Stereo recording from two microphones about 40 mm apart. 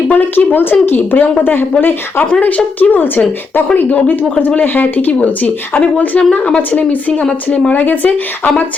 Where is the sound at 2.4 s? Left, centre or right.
Left.